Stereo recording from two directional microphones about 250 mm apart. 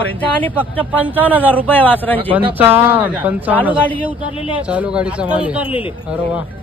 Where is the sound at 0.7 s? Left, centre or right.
Centre.